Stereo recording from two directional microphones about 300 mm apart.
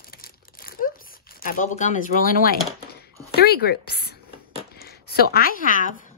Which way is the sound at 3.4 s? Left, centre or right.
Left.